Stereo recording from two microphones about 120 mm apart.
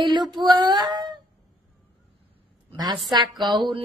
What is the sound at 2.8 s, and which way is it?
Speech, 35° right (ahead or behind).